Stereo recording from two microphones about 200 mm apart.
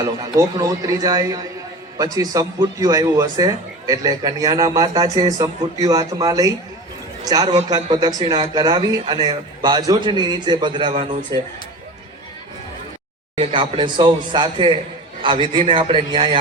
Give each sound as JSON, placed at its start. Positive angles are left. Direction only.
{"t": 0.0, "sound": "a man's voice", "side_deg": -20}
{"t": 13.3, "sound": "a man's voice", "side_deg": -25}